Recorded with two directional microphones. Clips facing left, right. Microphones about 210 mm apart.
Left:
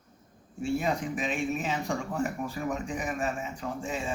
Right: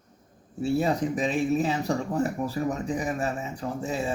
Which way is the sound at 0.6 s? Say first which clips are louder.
Right 4 dB; 35° right (ahead or behind).